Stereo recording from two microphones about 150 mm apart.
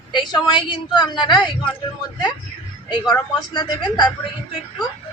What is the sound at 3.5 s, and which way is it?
Speech, 30° left (ahead or behind).